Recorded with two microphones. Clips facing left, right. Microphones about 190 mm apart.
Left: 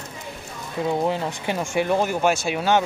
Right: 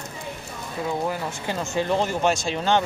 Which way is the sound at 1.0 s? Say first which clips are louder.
Left 3 dB; 20° left (ahead or behind).